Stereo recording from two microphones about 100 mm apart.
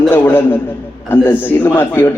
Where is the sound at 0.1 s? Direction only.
20° left (ahead or behind).